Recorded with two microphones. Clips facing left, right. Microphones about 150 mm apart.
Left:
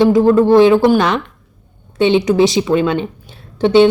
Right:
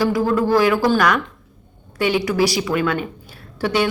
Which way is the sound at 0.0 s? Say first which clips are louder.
Left 8 dB; 25° left (ahead or behind).